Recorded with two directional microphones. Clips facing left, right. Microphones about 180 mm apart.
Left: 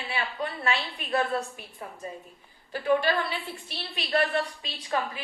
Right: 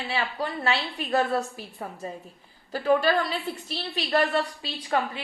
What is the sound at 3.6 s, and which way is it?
A woman's voice, 35° right (ahead or behind).